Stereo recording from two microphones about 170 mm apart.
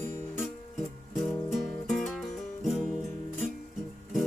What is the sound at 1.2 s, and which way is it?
Music, centre (ahead or behind).